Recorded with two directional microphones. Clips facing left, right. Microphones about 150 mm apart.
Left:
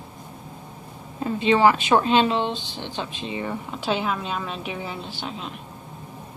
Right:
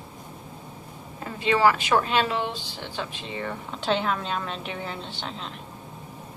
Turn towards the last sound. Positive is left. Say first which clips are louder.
# left 2 dB
turn(degrees=5)  # may be behind; listen again after turning